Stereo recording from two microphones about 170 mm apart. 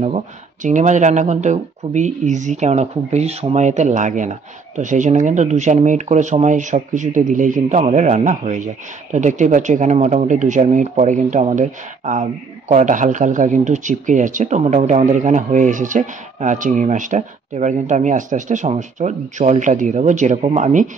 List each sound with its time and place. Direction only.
0.0 s speech: 45° right (ahead or behind)